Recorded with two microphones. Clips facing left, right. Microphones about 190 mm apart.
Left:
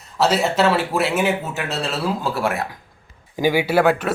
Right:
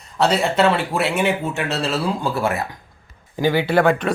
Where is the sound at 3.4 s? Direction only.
10° left (ahead or behind).